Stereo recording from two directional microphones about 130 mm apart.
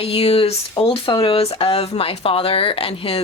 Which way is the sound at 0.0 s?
50° left (ahead or behind).